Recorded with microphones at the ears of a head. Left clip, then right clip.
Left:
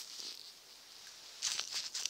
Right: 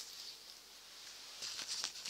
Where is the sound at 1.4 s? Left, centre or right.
Left.